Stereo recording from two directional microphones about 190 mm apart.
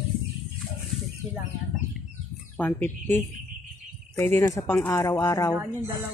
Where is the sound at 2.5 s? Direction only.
10° left (ahead or behind).